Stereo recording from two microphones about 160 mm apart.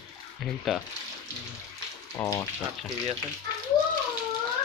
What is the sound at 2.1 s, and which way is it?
Speech, 20° left (ahead or behind).